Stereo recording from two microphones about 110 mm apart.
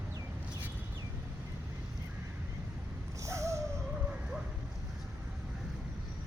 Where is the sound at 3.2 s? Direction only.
25° right (ahead or behind).